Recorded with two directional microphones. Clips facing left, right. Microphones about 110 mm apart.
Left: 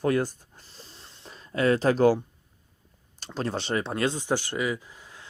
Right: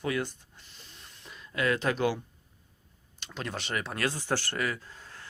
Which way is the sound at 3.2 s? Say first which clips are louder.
Left 7 dB; 35° left (ahead or behind).